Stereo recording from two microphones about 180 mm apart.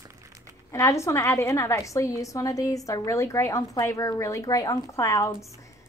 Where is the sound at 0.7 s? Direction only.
15° left (ahead or behind).